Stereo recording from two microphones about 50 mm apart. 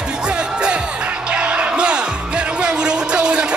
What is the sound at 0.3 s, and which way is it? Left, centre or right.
Music, right.